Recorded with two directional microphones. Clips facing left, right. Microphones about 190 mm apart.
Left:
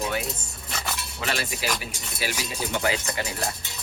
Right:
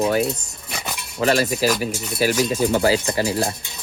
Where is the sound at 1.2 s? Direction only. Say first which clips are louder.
Right 12 dB; 40° right (ahead or behind).